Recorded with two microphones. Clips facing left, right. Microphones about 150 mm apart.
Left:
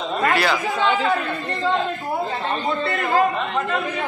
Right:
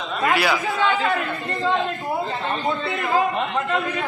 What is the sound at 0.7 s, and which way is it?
Speech, 20° left (ahead or behind).